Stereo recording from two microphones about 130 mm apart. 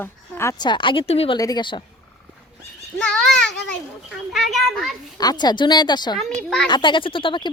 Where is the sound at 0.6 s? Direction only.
35° left (ahead or behind).